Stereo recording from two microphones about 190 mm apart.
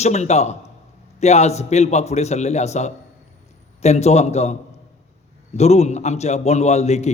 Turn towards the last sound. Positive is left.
turn(degrees=35)  # may be behind; listen again after turning